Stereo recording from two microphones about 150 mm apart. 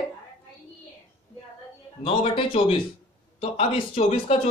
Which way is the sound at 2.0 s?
35° left (ahead or behind).